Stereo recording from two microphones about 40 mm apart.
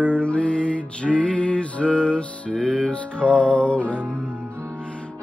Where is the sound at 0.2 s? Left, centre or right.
Left.